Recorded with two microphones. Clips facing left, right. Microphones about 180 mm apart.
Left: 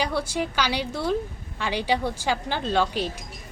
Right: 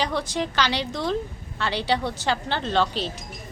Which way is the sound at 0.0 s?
10° left (ahead or behind).